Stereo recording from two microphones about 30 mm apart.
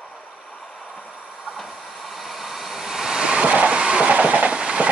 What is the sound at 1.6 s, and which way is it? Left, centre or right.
Vehicle, centre.